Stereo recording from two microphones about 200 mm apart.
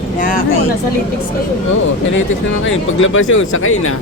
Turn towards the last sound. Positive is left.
turn(degrees=85)